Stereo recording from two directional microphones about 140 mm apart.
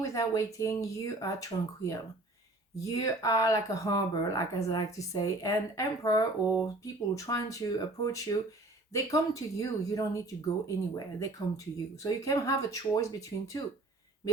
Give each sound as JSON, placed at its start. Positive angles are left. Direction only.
{"t": 0.0, "sound": "speech", "side_deg": 25}